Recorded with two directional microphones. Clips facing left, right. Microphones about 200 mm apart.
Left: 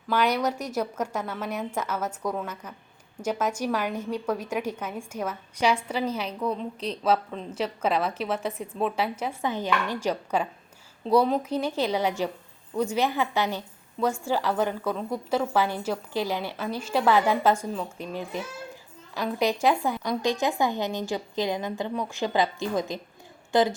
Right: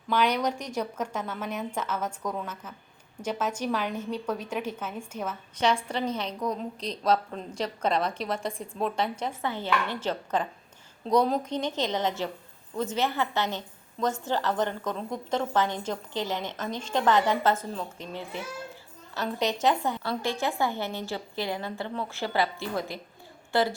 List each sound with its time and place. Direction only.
0.1 s a woman's voice: 10° left (ahead or behind)